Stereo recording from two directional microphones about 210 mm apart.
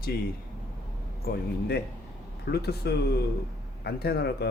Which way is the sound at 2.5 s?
50° left (ahead or behind).